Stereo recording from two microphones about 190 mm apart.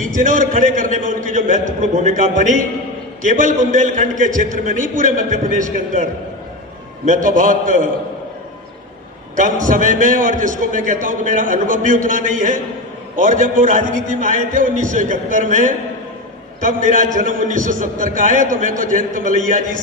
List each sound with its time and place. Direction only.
0.1 s a man's voice: 45° right (ahead or behind)
7.1 s a man's voice: 45° right (ahead or behind)
9.4 s a man's voice: 45° right (ahead or behind)